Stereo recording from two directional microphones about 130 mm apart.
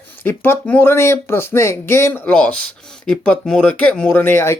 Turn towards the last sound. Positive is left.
turn(degrees=15)  # may be behind; listen again after turning